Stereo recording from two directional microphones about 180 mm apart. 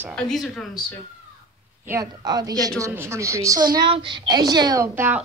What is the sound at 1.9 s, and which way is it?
A woman's voice, 20° right (ahead or behind).